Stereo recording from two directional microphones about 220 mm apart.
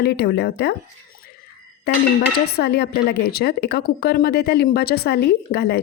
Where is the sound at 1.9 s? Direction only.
50° left (ahead or behind).